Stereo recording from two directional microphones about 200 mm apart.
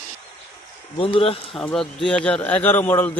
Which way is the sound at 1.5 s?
5° left (ahead or behind).